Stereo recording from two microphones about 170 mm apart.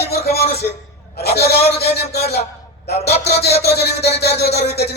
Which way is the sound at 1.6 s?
40° left (ahead or behind).